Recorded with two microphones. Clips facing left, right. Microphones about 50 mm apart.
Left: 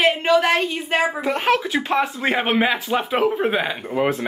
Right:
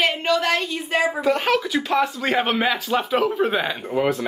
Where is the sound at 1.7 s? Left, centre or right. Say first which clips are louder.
Even; left; by 4.1 s centre.